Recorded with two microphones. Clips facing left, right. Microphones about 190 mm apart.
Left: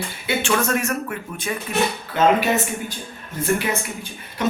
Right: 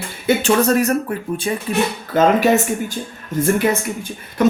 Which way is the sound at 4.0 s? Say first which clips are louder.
Right 8 dB; 45° right (ahead or behind).